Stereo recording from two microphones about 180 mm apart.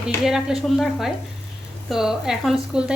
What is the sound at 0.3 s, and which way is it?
Speech, 5° right (ahead or behind).